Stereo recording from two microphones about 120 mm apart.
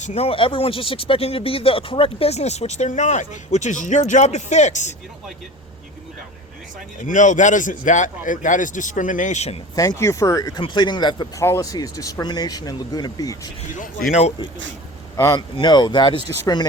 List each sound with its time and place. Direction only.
0.0 s speech: 60° left (ahead or behind); by 4.9 s 75° left (ahead or behind)
7.0 s a man's voice: 90° left; by 9.6 s 70° left (ahead or behind)
9.7 s speech: 30° left (ahead or behind)
11.3 s speech: 25° left (ahead or behind)
14.1 s speech: 65° left (ahead or behind)
15.1 s speech: 30° left (ahead or behind)